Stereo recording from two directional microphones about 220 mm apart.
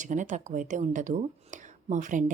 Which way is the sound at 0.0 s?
35° right (ahead or behind).